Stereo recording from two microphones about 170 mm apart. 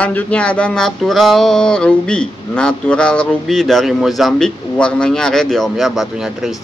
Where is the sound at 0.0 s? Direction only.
10° left (ahead or behind).